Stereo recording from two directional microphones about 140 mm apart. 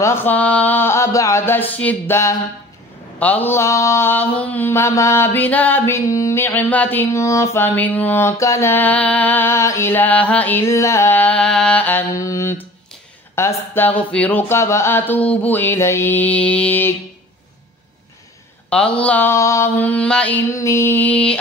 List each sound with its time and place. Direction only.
0.0 s mantra: 15° left (ahead or behind)
12.2 s a sound: 20° left (ahead or behind)
13.3 s mantra: 20° left (ahead or behind)
18.7 s mantra: 10° left (ahead or behind)
20.5 s mantra: 20° left (ahead or behind)